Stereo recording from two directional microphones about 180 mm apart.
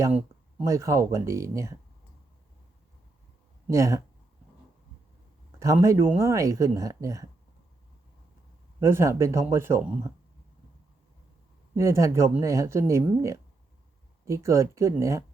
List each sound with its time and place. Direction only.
0.6 s speech: 15° right (ahead or behind)
3.7 s speech: 15° right (ahead or behind)
5.5 s speech: 15° right (ahead or behind)
8.8 s speech: 15° right (ahead or behind)
11.8 s speech: 15° right (ahead or behind)